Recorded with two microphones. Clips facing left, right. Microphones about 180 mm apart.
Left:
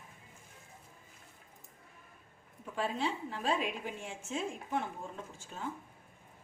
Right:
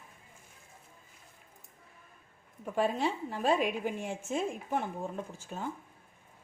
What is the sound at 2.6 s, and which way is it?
A woman's voice, 50° right (ahead or behind).